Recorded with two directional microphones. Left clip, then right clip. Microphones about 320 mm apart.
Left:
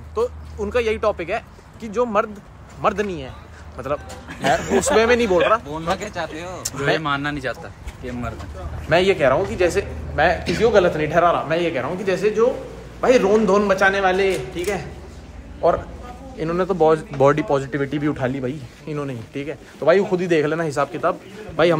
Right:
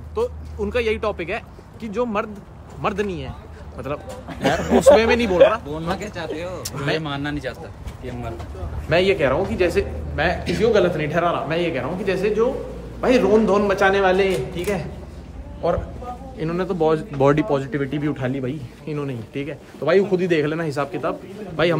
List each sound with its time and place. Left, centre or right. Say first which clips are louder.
0.1 s speech: left 1 dB; centre
4.3 s speech: left 1 dB; centre
4.7 s speech: right 5 dB; centre
7.0 s speech: left 4 dB; centre
8.8 s speech: left 2 dB; centre